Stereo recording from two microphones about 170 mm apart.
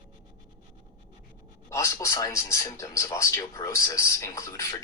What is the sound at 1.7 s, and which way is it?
A man's voice, 20° left (ahead or behind).